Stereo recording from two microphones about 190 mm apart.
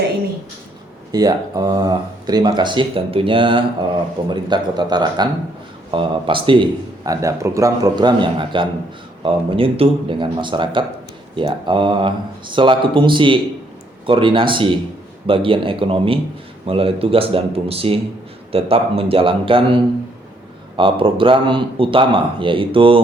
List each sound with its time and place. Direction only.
1.1 s speech: 20° right (ahead or behind)